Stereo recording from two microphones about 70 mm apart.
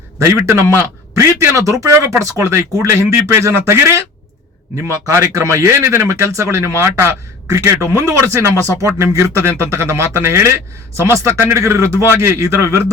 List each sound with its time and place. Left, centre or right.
0.2 s speech: right